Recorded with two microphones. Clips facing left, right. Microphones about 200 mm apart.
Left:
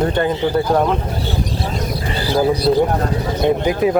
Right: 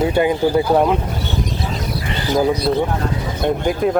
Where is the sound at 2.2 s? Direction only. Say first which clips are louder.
Even; 35° left (ahead or behind).